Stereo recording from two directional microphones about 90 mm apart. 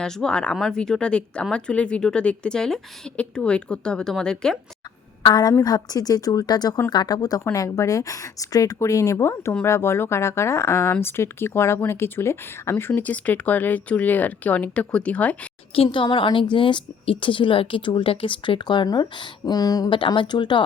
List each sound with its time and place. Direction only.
0.0 s speech: 5° left (ahead or behind)
5.2 s a woman's voice: 50° left (ahead or behind); by 12.9 s 25° left (ahead or behind)
12.9 s speech: 15° left (ahead or behind)
15.7 s a woman's voice: 80° left; by 19.5 s 60° left (ahead or behind)
19.5 s speech: 45° left (ahead or behind)
19.9 s speech: 65° left (ahead or behind)